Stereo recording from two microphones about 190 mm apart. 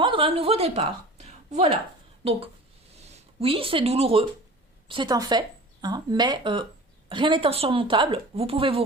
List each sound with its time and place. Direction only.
0.0 s a woman's voice: 25° right (ahead or behind)
3.0 s speech: 35° right (ahead or behind)